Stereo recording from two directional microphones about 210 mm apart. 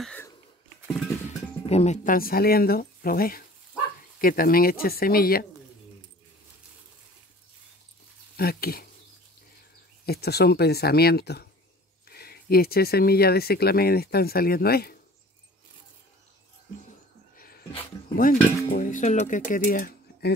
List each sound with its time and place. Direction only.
0.0 s a sound: 5° left (ahead or behind)
1.7 s speech: 30° left (ahead or behind)
8.4 s speech: 45° left (ahead or behind)
10.0 s speech: 50° left (ahead or behind)
18.1 s speech: 40° left (ahead or behind)